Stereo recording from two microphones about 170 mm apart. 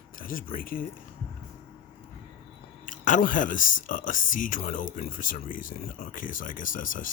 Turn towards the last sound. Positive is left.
turn(degrees=50)  # may be behind; listen again after turning